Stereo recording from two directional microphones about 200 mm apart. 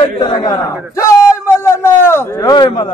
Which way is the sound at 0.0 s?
20° left (ahead or behind).